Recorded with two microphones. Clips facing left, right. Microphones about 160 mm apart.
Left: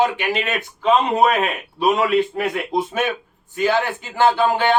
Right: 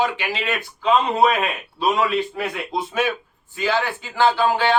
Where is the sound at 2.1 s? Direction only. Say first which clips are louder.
Left 5 dB; 20° left (ahead or behind).